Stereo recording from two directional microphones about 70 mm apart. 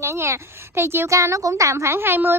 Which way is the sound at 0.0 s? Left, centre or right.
Right.